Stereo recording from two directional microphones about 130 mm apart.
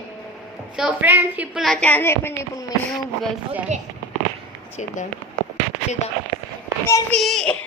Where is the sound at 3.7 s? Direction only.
65° right (ahead or behind).